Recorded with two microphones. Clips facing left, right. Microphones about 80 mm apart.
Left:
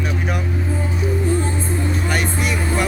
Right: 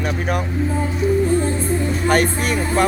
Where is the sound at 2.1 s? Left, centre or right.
Right.